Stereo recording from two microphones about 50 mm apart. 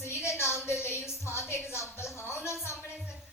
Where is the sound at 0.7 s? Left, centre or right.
Left.